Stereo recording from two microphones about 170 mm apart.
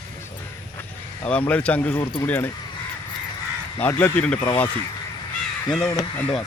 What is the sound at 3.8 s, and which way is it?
Speech, 10° left (ahead or behind).